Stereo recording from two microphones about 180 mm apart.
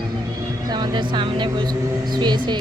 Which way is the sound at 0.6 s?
20° right (ahead or behind).